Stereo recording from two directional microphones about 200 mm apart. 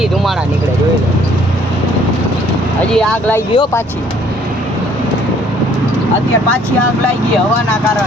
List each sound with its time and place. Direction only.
0.0 s vehicle: centre (ahead or behind)
2.9 s speech: 5° left (ahead or behind)
3.5 s speech: 20° left (ahead or behind)